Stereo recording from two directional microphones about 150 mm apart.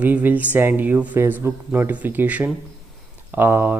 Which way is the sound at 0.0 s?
10° right (ahead or behind).